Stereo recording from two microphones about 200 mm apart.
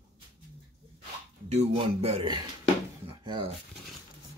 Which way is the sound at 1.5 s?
30° right (ahead or behind).